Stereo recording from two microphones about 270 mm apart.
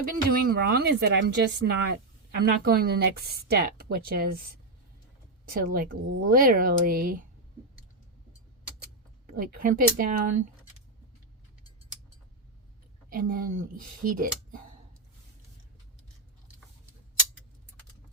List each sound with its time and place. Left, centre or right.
0.0 s speech: right
5.5 s speech: right
9.2 s speech: right
13.1 s speech: right